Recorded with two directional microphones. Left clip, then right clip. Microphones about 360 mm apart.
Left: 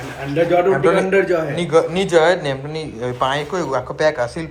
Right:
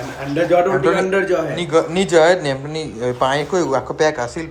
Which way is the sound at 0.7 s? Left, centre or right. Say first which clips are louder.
Left 1 dB; centre.